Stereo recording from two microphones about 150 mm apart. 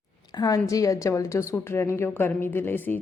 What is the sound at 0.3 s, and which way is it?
A woman's voice, 25° left (ahead or behind).